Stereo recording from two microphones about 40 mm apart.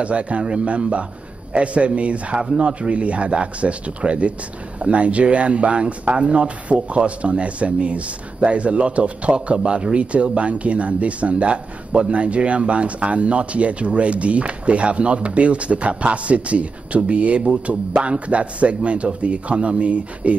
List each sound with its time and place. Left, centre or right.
0.0 s speech: right